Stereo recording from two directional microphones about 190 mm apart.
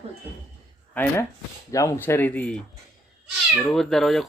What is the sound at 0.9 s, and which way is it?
Speech, 10° left (ahead or behind).